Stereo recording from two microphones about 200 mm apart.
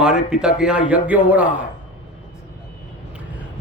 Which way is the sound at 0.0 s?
5° right (ahead or behind).